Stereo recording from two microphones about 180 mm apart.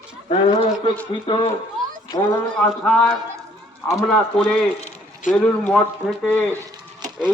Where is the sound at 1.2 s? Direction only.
30° left (ahead or behind).